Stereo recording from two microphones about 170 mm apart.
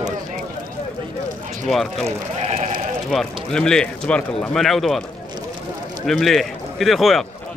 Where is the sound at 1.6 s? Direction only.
Centre (ahead or behind).